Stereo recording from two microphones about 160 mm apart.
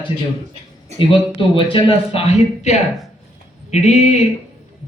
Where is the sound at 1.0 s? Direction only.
30° left (ahead or behind).